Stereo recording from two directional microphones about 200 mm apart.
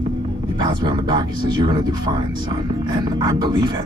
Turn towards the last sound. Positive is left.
turn(degrees=-20)  # may be behind; listen again after turning